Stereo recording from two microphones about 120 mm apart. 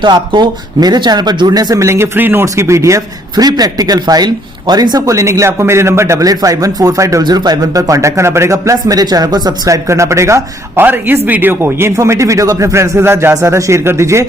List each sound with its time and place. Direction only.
0.0 s speech: 35° right (ahead or behind)